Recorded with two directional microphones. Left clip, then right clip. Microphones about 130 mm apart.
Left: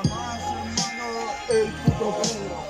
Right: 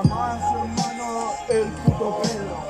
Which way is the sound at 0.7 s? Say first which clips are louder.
Right 2 dB; 15° right (ahead or behind).